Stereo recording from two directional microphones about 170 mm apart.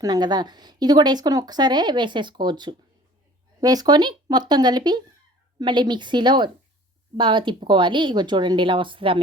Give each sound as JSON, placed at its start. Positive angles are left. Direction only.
{"t": 0.0, "sound": "speech", "side_deg": -25}